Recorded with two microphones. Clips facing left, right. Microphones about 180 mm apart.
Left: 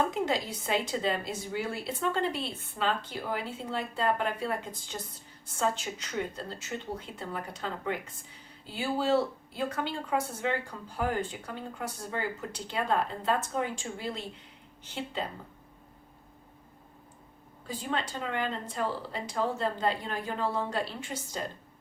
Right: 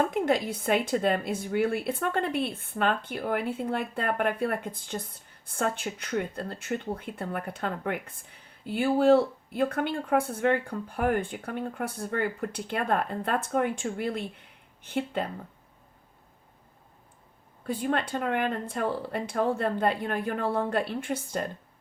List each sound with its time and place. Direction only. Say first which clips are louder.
0.1 s a woman's voice: right 4 dB; 55° right (ahead or behind)
17.7 s a woman's voice: right 6 dB; 55° right (ahead or behind)